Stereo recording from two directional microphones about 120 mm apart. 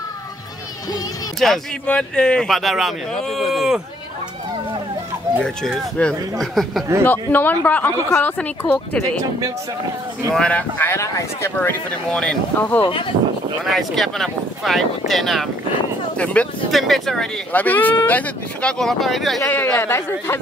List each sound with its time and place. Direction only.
1.4 s speech: 5° left (ahead or behind)
5.4 s speech: 5° left (ahead or behind)
7.1 s speech: 15° left (ahead or behind)
10.3 s speech: 10° left (ahead or behind)
12.1 s speech: 5° left (ahead or behind)
12.8 s speech: 45° left (ahead or behind)
13.7 s speech: centre (ahead or behind)
17.5 s speech: 15° left (ahead or behind)
19.4 s speech: 20° left (ahead or behind)